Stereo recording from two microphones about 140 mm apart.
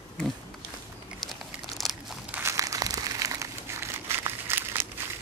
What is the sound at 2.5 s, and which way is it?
Crumpling, 25° right (ahead or behind).